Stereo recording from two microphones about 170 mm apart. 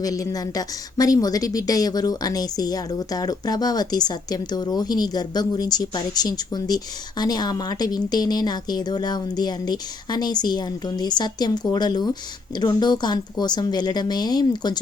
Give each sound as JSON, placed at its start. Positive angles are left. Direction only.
{"t": 0.0, "sound": "a woman's voice", "side_deg": 20}